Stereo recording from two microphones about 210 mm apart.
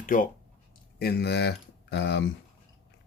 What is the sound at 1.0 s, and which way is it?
Speech, 50° left (ahead or behind).